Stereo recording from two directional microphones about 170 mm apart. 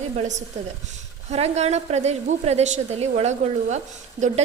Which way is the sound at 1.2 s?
40° right (ahead or behind).